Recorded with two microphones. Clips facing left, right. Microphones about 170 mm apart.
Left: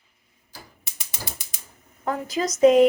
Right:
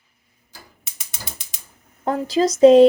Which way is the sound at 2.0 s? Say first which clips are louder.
Right 7 dB; 30° right (ahead or behind).